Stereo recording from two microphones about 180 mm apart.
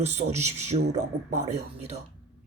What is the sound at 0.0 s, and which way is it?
Speech, 35° right (ahead or behind).